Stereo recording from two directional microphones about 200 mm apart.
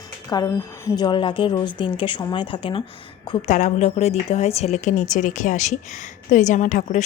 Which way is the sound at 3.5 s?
35° left (ahead or behind).